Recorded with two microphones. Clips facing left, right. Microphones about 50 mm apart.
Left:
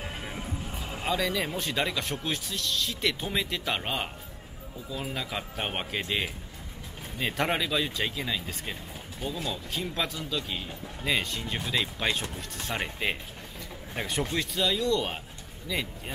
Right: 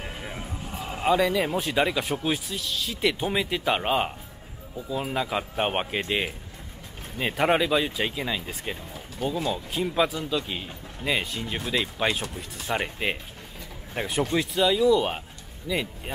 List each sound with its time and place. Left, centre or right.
0.1 s speech: centre